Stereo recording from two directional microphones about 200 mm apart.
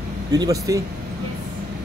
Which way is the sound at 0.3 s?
20° right (ahead or behind).